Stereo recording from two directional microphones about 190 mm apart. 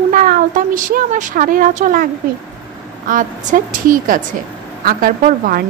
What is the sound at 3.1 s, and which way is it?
Speech, 45° right (ahead or behind).